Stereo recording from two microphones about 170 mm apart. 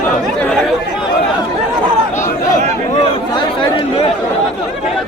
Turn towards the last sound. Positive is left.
turn(degrees=30)  # may be behind; listen again after turning